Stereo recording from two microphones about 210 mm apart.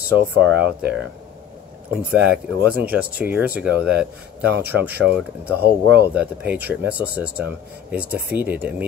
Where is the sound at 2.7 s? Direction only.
45° right (ahead or behind).